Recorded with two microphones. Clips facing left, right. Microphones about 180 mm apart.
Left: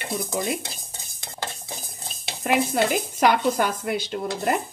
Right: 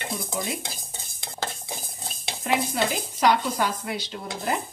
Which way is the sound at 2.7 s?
55° left (ahead or behind).